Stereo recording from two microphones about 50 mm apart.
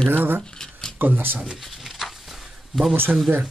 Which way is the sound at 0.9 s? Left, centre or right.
Right.